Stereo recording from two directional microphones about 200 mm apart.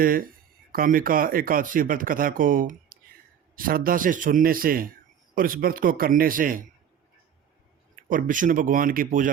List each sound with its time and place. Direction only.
0.0 s a man's voice: 45° right (ahead or behind)
8.1 s a man's voice: 40° right (ahead or behind)